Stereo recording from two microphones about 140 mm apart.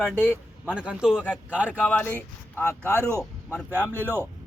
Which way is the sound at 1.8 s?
10° left (ahead or behind).